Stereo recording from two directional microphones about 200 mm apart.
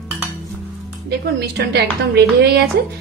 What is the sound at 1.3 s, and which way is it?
A woman's voice, 55° right (ahead or behind).